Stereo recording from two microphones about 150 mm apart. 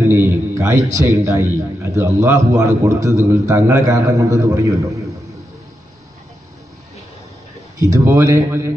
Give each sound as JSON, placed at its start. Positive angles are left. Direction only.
{"t": 0.0, "sound": "a man's voice", "side_deg": -20}
{"t": 7.8, "sound": "a man's voice", "side_deg": -20}